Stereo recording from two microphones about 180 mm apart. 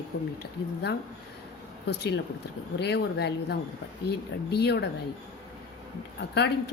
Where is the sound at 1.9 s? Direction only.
70° left (ahead or behind).